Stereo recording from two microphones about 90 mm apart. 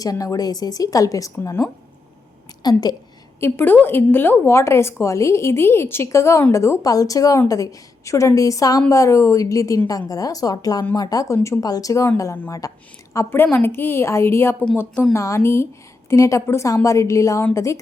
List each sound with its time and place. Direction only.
0.0 s a woman's voice: 40° left (ahead or behind)
2.6 s a woman's voice: 50° left (ahead or behind)
3.4 s a woman's voice: 25° left (ahead or behind); by 12.7 s 40° left (ahead or behind)
13.1 s a woman's voice: 25° left (ahead or behind)